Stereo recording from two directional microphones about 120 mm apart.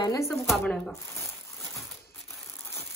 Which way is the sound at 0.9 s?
25° left (ahead or behind).